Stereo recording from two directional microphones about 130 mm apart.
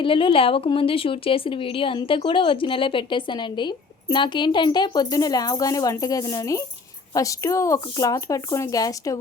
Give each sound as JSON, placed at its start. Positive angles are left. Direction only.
{"t": 0.0, "sound": "a woman's voice", "side_deg": 40}